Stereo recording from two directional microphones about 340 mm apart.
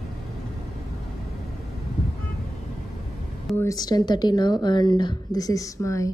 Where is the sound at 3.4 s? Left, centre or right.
Centre.